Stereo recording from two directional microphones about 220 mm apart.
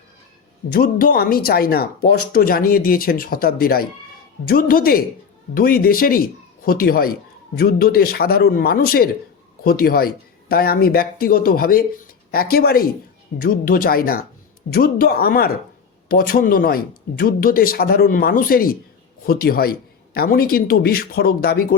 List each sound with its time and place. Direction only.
0.7 s a man's voice: 40° left (ahead or behind)